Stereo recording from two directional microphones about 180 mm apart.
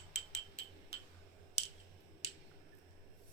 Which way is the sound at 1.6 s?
35° left (ahead or behind).